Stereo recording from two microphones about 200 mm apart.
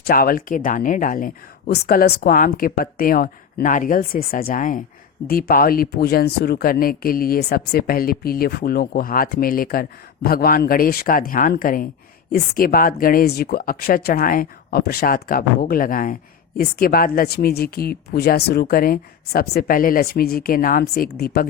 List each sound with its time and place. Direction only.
0.1 s speech: 45° left (ahead or behind)